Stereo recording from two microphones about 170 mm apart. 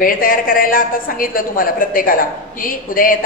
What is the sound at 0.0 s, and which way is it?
A woman's voice, 55° left (ahead or behind).